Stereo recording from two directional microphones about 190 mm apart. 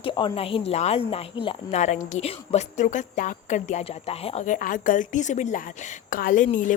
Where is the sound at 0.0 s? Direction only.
25° left (ahead or behind).